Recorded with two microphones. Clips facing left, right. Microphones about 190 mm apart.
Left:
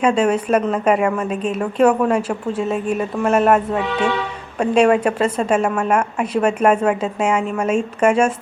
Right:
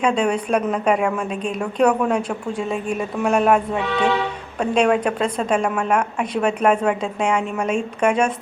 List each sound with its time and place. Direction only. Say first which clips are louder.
0.0 s a woman's voice: left 3 dB; 5° left (ahead or behind)
4.6 s a woman's voice: left 3 dB; 5° left (ahead or behind)